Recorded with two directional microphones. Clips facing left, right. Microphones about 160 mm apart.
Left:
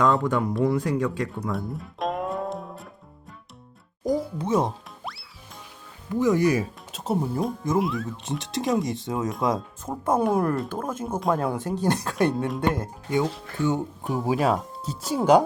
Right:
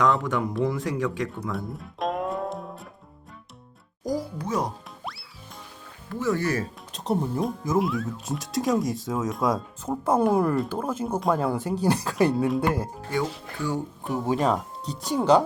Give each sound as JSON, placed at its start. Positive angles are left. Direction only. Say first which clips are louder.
{"t": 0.1, "sound": "speech", "louder": "left 2 dB", "side_deg": 0}
{"t": 1.4, "sound": "music", "louder": "left 2 dB", "side_deg": 0}
{"t": 4.0, "sound": "music", "louder": "left 3 dB", "side_deg": 25}
{"t": 6.1, "sound": "speech", "louder": "left 5 dB", "side_deg": 15}
{"t": 14.0, "sound": "speech", "louder": "even", "side_deg": 0}